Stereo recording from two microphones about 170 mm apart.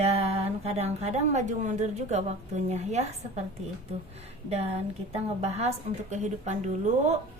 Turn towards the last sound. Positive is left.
turn(degrees=-45)  # may be behind; listen again after turning